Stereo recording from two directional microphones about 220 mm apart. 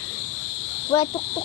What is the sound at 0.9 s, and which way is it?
Speech, 20° left (ahead or behind).